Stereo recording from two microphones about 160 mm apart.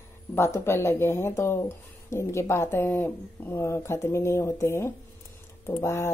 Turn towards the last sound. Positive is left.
turn(degrees=15)  # may be behind; listen again after turning